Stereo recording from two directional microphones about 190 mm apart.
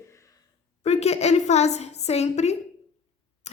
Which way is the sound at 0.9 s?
35° left (ahead or behind).